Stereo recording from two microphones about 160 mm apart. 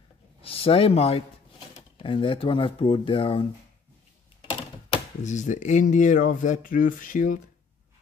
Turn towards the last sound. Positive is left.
turn(degrees=55)  # may be behind; listen again after turning